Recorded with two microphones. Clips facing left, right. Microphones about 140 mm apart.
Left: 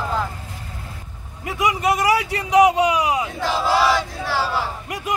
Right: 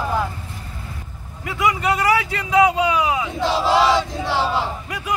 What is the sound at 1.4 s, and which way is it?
Speech, 15° left (ahead or behind).